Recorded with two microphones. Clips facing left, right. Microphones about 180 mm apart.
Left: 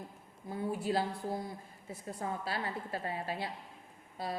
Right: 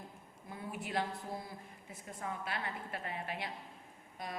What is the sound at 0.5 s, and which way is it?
Speech, 30° left (ahead or behind).